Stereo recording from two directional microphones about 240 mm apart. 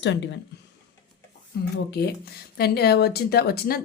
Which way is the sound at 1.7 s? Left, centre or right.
Left.